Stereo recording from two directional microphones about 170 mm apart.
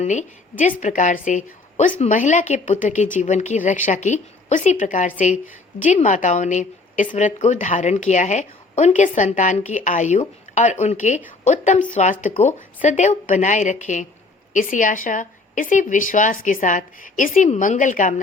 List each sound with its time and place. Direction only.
0.0 s a woman's voice: 45° left (ahead or behind)